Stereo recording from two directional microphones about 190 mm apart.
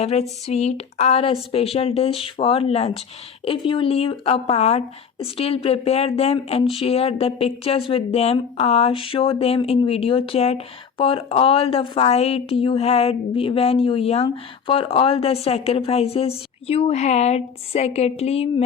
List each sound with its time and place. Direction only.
0.0 s a woman's voice: 35° left (ahead or behind)